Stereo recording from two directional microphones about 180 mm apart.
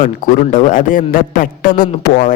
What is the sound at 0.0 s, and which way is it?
A man's voice, 45° left (ahead or behind).